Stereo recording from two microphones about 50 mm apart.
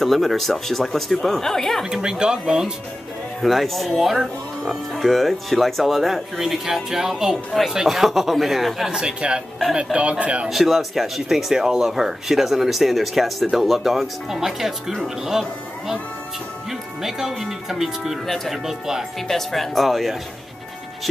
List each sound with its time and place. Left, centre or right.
0.0 s speech: centre
1.9 s speech: centre
3.3 s speech: centre
9.0 s speech: centre
10.5 s speech: centre
17.0 s speech: centre
19.2 s speech: centre